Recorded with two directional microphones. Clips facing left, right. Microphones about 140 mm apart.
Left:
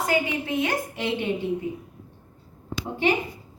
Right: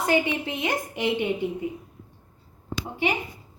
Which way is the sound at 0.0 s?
25° right (ahead or behind).